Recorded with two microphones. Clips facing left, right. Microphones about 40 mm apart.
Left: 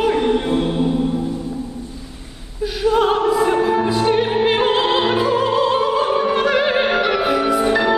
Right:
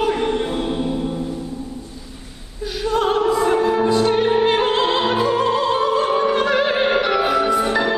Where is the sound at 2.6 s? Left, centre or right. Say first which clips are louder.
Left 4 dB; centre.